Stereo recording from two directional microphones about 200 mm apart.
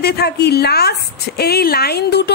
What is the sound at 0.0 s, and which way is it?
A woman's voice, 55° left (ahead or behind).